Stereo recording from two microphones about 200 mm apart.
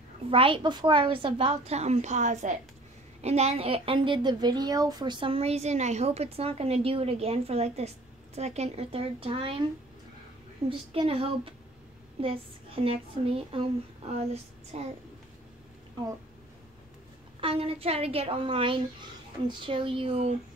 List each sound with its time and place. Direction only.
0.3 s a woman's voice: 25° right (ahead or behind)
10.7 s a woman's voice: 30° right (ahead or behind)
14.7 s a child's voice: 35° right (ahead or behind)
17.4 s a woman's voice: 30° right (ahead or behind)